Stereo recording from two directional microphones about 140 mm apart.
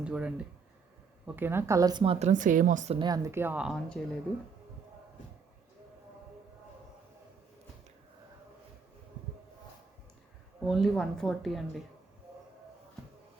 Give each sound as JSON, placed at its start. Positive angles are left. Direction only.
{"t": 0.0, "sound": "a woman's voice", "side_deg": -5}
{"t": 2.0, "sound": "speech", "side_deg": -50}
{"t": 2.9, "sound": "speech", "side_deg": -35}
{"t": 3.2, "sound": "speech", "side_deg": -15}
{"t": 4.0, "sound": "speech", "side_deg": 5}
{"t": 10.7, "sound": "speech", "side_deg": 0}